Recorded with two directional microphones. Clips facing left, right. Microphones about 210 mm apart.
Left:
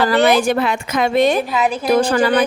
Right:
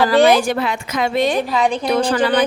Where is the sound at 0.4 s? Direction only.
55° left (ahead or behind).